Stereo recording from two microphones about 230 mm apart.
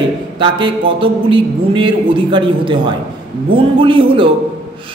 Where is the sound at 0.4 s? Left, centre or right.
Right.